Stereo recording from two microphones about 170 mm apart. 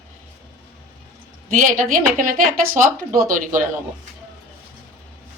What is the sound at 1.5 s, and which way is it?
Speech, 50° right (ahead or behind).